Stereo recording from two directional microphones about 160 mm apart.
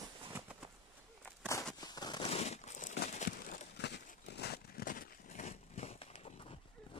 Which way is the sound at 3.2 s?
60° left (ahead or behind).